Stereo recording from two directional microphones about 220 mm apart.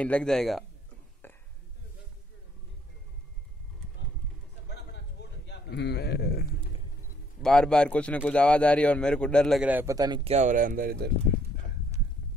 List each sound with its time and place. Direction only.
0.0 s a man's voice: 5° left (ahead or behind)
1.2 s whispering: 10° left (ahead or behind)
5.5 s a man's voice: 50° left (ahead or behind)
7.4 s a man's voice: 5° left (ahead or behind); by 11.1 s 40° right (ahead or behind)